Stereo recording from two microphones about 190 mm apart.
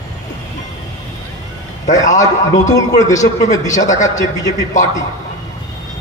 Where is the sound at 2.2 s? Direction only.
20° left (ahead or behind).